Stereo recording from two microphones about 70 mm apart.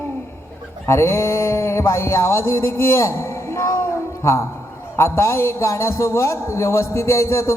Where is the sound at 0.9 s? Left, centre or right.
Left.